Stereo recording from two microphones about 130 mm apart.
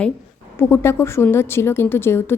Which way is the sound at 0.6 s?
20° left (ahead or behind).